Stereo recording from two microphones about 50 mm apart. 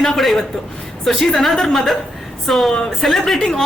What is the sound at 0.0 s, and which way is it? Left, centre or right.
A woman's voice, centre.